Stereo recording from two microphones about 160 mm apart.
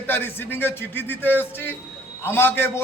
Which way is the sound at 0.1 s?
15° left (ahead or behind).